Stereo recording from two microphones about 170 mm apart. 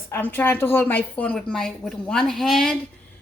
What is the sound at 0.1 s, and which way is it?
Speech, 10° left (ahead or behind).